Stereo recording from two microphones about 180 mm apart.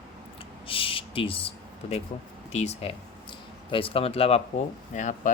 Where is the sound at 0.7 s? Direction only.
30° left (ahead or behind).